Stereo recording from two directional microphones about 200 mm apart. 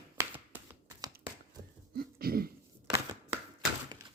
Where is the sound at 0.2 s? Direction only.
15° right (ahead or behind).